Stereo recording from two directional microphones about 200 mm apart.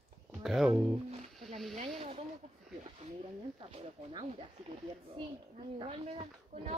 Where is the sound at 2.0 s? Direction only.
30° right (ahead or behind).